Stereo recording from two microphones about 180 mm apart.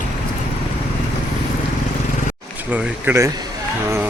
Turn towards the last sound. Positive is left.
turn(degrees=-15)  # may be behind; listen again after turning